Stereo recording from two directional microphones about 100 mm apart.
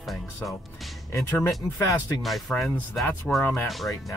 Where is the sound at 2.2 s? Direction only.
Centre (ahead or behind).